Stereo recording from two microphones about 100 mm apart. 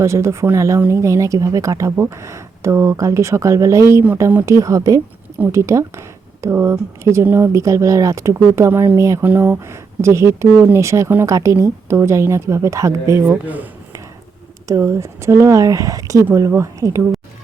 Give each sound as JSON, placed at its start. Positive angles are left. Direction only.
{"t": 0.0, "sound": "a woman's voice", "side_deg": -30}
{"t": 13.4, "sound": "speech", "side_deg": -15}
{"t": 14.7, "sound": "speech", "side_deg": -30}